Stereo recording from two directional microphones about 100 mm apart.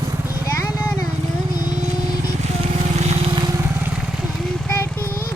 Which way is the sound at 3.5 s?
25° right (ahead or behind).